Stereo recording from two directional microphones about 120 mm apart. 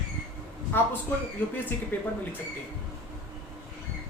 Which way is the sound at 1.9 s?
15° left (ahead or behind).